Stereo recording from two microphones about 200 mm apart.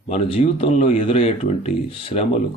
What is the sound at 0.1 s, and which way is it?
Speech, 30° left (ahead or behind).